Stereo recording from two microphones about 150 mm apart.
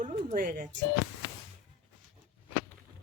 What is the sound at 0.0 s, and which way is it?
Music, 50° right (ahead or behind).